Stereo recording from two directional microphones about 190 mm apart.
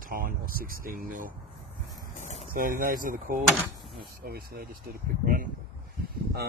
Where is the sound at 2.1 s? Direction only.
40° left (ahead or behind).